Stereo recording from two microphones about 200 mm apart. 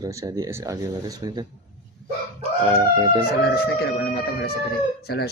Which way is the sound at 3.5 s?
55° left (ahead or behind).